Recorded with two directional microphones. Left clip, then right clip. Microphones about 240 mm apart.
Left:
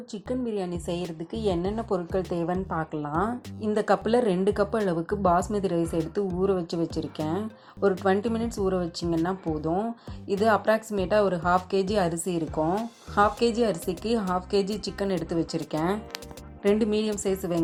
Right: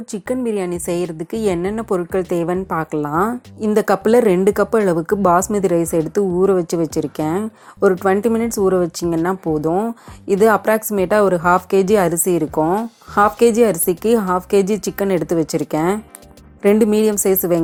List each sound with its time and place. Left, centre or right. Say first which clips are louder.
0.1 s a woman's voice: right 10 dB; right